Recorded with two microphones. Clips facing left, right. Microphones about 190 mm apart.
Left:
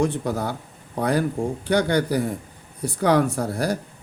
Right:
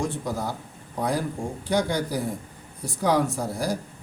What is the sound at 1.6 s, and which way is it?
Speech, 65° left (ahead or behind).